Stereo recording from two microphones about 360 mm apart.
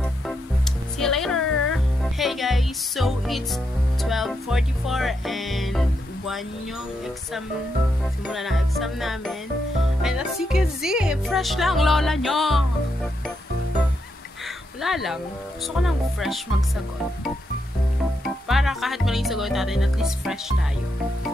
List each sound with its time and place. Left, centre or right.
0.0 s music: centre
8.3 s speech: centre
14.8 s speech: centre
18.2 s speech: centre